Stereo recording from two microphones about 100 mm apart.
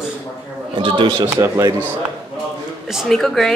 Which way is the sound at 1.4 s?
35° right (ahead or behind).